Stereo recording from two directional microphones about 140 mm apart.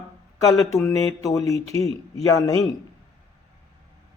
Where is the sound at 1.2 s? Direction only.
25° left (ahead or behind).